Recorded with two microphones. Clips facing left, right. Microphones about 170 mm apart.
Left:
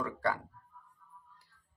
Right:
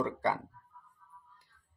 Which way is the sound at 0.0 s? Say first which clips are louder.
Right 2 dB; 20° right (ahead or behind).